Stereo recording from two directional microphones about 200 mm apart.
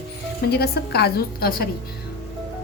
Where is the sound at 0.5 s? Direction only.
55° left (ahead or behind).